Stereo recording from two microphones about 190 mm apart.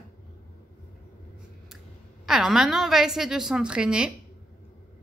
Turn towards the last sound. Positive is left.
turn(degrees=-5)  # may be behind; listen again after turning